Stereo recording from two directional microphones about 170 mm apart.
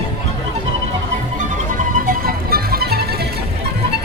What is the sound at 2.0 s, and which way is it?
Music, 60° right (ahead or behind).